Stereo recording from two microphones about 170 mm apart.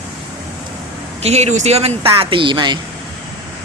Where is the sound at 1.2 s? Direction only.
40° right (ahead or behind).